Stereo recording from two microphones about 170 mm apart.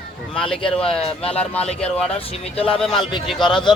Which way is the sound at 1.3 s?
10° left (ahead or behind).